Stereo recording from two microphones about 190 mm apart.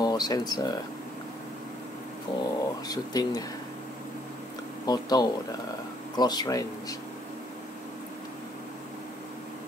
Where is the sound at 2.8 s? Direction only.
20° left (ahead or behind).